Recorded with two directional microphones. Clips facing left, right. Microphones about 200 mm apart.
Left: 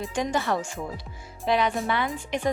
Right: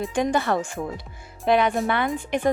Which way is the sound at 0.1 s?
55° right (ahead or behind).